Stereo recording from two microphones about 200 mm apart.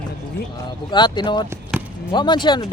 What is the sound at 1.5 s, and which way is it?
Basketball bounce, 10° right (ahead or behind).